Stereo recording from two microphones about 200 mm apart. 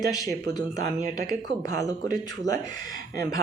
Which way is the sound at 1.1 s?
20° left (ahead or behind).